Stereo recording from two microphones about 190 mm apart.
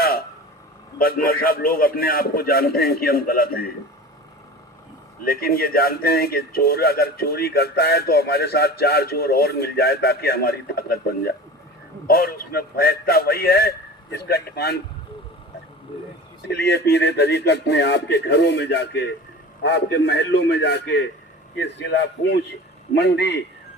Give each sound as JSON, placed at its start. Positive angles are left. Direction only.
{"t": 0.0, "sound": "a sound", "side_deg": 55}
{"t": 0.9, "sound": "a man's voice", "side_deg": 50}
{"t": 5.2, "sound": "a man's voice", "side_deg": 50}
{"t": 16.5, "sound": "speech", "side_deg": 60}